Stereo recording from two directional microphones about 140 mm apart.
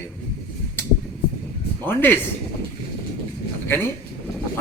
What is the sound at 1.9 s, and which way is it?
Speech, 15° left (ahead or behind).